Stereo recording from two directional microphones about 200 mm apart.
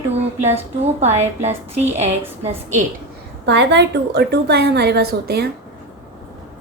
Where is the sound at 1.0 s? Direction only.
35° right (ahead or behind).